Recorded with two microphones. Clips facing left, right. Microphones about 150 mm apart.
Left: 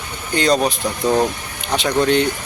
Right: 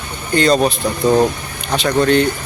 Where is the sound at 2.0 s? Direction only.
15° left (ahead or behind).